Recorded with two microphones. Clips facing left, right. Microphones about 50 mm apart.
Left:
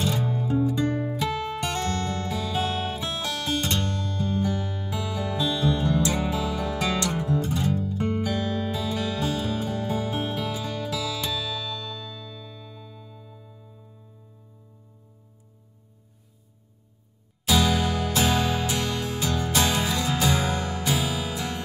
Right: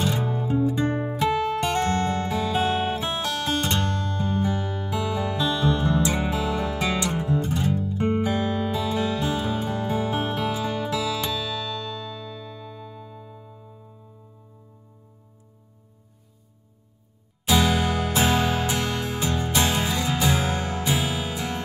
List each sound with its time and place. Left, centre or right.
0.0 s music: right
17.5 s music: right